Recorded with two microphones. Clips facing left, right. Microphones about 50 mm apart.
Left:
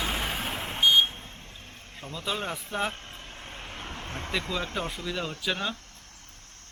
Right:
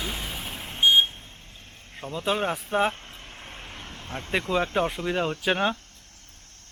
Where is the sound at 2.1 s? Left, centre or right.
Right.